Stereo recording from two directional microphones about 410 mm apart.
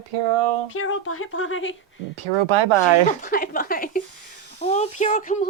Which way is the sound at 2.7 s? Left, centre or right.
Right.